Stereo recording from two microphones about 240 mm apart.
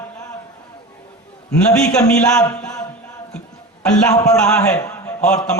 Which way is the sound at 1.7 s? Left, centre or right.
Centre.